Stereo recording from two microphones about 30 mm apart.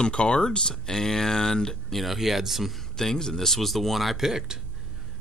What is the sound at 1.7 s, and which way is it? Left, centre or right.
Speech, centre.